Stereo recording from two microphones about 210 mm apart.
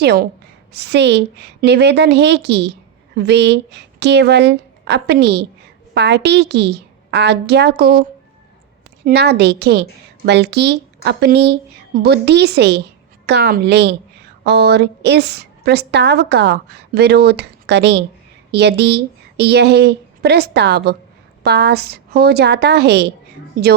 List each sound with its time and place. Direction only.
0.0 s a woman's voice: 50° right (ahead or behind)
9.0 s a woman's voice: 50° right (ahead or behind)
23.6 s a woman's voice: 40° right (ahead or behind)